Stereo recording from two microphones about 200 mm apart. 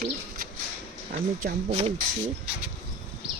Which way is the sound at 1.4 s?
45° right (ahead or behind).